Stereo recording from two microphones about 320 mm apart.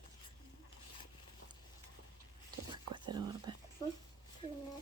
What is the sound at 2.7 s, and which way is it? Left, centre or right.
Whispering, centre.